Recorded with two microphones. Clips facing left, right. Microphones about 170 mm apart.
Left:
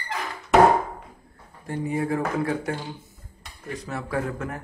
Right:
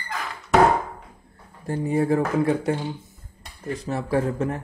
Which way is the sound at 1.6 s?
35° right (ahead or behind).